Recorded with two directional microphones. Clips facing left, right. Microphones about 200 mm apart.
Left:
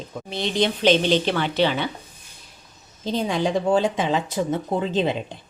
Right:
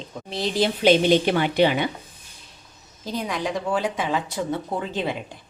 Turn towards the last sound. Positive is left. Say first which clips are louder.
# left 5 dB
turn(degrees=25)  # may be behind; listen again after turning